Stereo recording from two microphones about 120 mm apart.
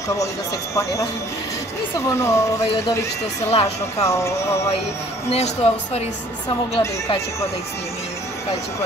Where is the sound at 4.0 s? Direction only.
25° left (ahead or behind).